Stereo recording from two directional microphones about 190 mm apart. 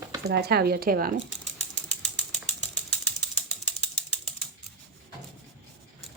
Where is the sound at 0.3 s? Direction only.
55° right (ahead or behind).